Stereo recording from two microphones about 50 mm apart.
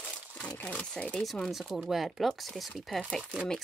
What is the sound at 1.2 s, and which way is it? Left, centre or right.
Speech, centre.